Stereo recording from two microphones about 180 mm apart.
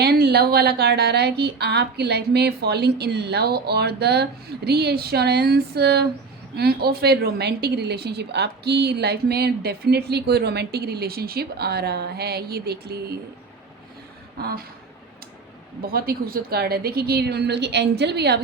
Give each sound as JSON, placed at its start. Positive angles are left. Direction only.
{"t": 0.0, "sound": "a woman's voice", "side_deg": -60}
{"t": 15.8, "sound": "a woman's voice", "side_deg": -55}